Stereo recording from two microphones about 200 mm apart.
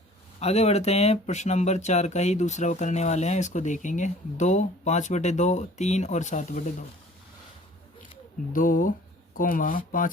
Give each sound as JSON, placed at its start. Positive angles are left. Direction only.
{"t": 0.3, "sound": "speech", "side_deg": 30}
{"t": 8.5, "sound": "speech", "side_deg": 40}